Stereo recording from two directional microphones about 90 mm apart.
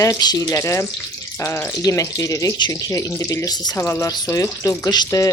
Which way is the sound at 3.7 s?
30° left (ahead or behind).